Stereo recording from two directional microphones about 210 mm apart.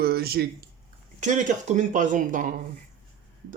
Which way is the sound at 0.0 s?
45° right (ahead or behind).